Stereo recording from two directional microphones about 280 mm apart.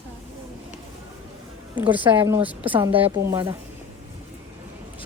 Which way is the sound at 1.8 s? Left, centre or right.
Centre.